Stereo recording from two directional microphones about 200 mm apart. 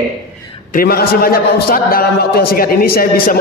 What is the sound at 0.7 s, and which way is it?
A man's voice, 50° left (ahead or behind).